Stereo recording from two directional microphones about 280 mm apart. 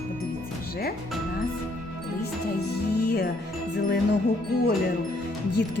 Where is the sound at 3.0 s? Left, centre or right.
Left.